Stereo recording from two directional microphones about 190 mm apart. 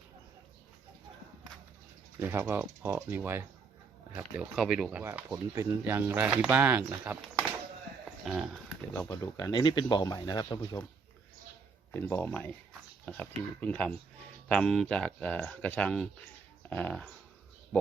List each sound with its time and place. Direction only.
2.1 s speech: 15° right (ahead or behind)
4.2 s speech: centre (ahead or behind)
8.2 s a sound: centre (ahead or behind)
8.9 s speech: 15° left (ahead or behind)
11.9 s speech: 10° left (ahead or behind)